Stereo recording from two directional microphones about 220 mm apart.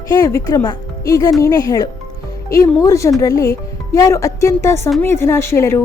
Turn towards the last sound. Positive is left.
turn(degrees=10)  # may be behind; listen again after turning